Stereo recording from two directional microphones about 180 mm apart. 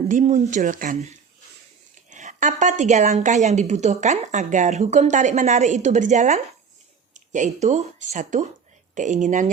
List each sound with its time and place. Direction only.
0.1 s a woman's voice: 40° right (ahead or behind)
2.0 s a woman's voice: 45° right (ahead or behind)